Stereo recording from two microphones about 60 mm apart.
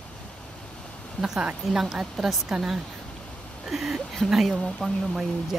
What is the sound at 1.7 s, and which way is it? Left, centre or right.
Speech, centre.